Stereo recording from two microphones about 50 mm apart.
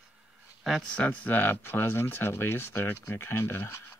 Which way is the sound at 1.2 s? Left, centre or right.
Left.